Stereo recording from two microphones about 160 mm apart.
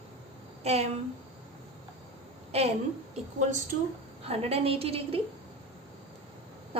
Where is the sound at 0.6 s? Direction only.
40° right (ahead or behind).